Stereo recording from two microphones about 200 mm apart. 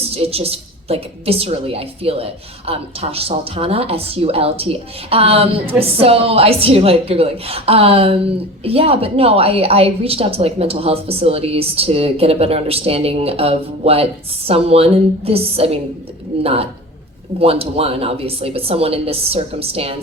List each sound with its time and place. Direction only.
0.1 s a woman's voice: 30° right (ahead or behind)